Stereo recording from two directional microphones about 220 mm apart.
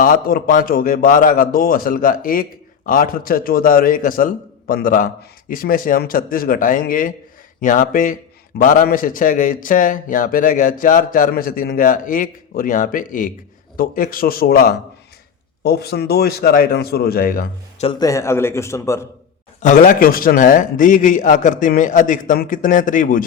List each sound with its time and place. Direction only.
0.0 s a man's voice: 40° left (ahead or behind)
17.8 s speech: 15° left (ahead or behind)
19.6 s a man's voice: 35° left (ahead or behind)